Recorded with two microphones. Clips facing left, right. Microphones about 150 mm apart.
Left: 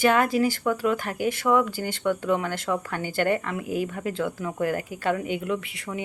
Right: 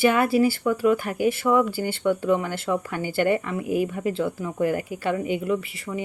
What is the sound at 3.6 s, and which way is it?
Speech, 50° right (ahead or behind).